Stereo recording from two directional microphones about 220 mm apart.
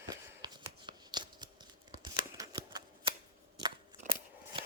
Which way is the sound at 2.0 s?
20° right (ahead or behind).